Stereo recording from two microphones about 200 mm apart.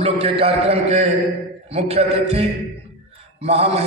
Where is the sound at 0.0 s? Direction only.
30° right (ahead or behind).